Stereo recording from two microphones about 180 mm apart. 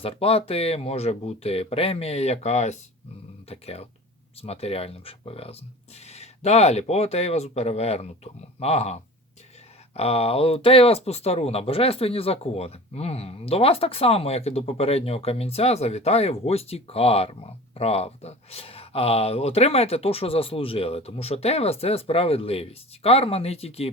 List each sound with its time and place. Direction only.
0.0 s speech: 30° left (ahead or behind)